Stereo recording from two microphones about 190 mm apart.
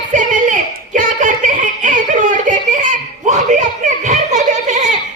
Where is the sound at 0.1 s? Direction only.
40° right (ahead or behind).